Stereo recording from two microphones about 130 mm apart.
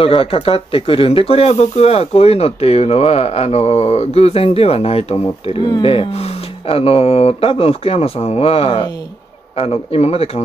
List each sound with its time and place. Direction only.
0.0 s speech: 45° left (ahead or behind)
5.6 s speech: 40° left (ahead or behind)